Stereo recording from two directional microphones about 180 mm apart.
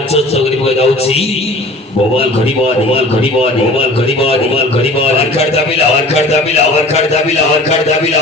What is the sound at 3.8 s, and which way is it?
A man's voice, 30° left (ahead or behind).